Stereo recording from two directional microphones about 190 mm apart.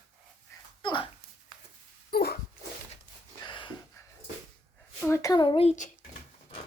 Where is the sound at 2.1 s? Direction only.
55° left (ahead or behind).